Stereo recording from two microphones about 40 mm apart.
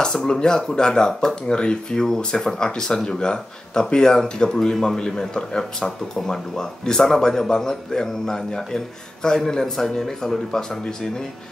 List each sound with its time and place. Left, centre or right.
0.0 s speech: centre